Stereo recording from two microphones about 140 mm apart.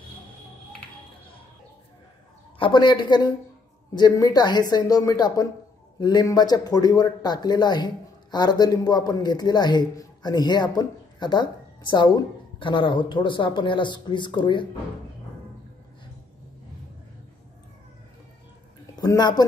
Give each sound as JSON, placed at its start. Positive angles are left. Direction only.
{"t": 2.6, "sound": "speech", "side_deg": 35}
{"t": 18.9, "sound": "speech", "side_deg": 30}